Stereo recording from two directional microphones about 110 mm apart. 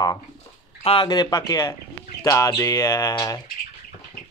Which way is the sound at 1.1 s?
35° left (ahead or behind).